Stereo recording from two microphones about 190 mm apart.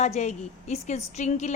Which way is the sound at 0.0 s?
35° left (ahead or behind).